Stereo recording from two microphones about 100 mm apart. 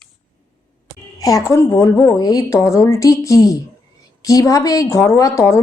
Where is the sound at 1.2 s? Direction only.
35° left (ahead or behind).